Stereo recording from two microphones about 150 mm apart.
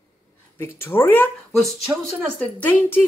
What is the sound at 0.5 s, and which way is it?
Speech, 15° left (ahead or behind).